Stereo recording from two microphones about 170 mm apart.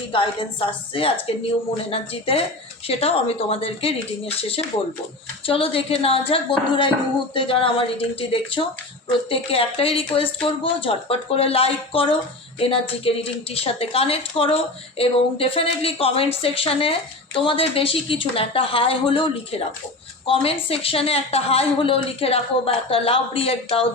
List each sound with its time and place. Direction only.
0.1 s a woman's voice: 30° left (ahead or behind)